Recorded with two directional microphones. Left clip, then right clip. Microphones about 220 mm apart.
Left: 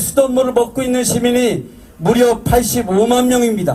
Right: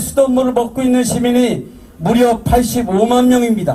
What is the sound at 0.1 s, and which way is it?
A man's voice, 35° left (ahead or behind).